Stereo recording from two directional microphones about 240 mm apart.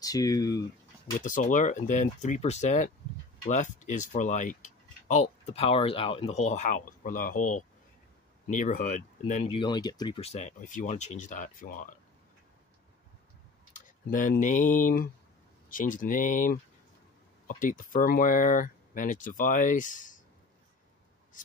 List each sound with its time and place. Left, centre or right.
0.0 s speech: centre
1.2 s speech: left
13.7 s speech: left